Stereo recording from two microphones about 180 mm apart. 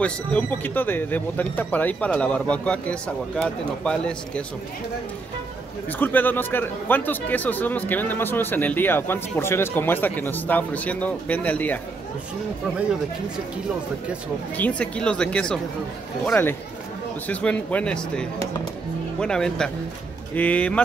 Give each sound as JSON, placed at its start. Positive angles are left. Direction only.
{"t": 0.0, "sound": "speech", "side_deg": 5}
{"t": 5.9, "sound": "speech", "side_deg": 10}
{"t": 14.6, "sound": "speech", "side_deg": 5}